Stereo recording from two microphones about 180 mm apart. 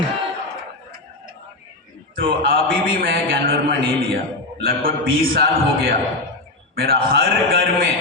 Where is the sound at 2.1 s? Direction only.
50° right (ahead or behind).